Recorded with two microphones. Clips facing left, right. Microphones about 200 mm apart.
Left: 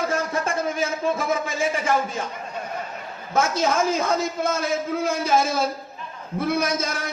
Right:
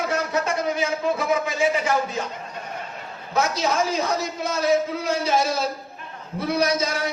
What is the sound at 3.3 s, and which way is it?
A man's voice, 50° left (ahead or behind).